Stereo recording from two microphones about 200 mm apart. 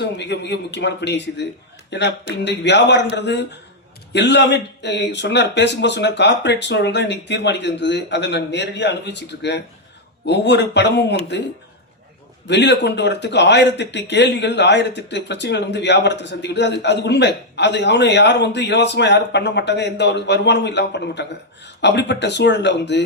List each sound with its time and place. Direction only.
0.0 s speech: 60° left (ahead or behind)
12.5 s speech: 60° left (ahead or behind)